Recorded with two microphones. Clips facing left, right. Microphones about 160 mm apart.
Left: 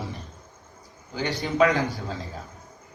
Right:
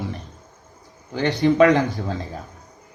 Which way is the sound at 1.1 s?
70° right (ahead or behind).